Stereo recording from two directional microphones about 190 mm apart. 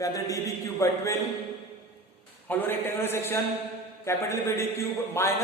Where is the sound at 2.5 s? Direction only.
10° left (ahead or behind).